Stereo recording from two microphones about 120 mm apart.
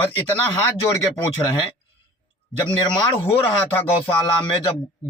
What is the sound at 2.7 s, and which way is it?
Speech, 45° left (ahead or behind).